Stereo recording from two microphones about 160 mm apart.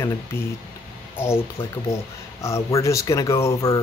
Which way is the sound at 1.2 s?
15° left (ahead or behind).